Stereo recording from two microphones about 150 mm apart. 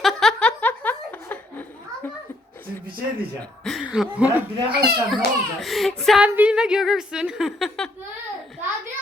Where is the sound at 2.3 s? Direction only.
15° left (ahead or behind).